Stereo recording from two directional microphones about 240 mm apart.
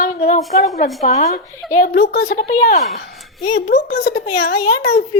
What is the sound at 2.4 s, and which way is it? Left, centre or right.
Speech, left.